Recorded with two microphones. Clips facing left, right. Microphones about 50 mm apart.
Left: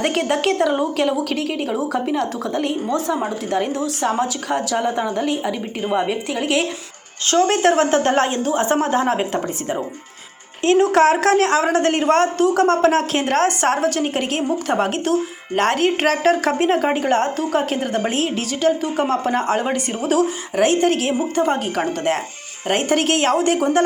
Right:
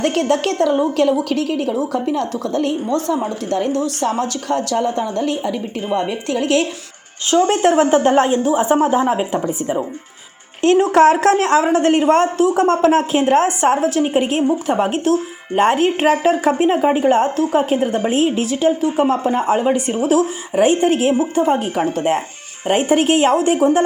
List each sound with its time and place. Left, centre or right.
0.0 s a woman's voice: centre
7.3 s a woman's voice: centre
10.8 s speech: right
13.1 s a woman's voice: centre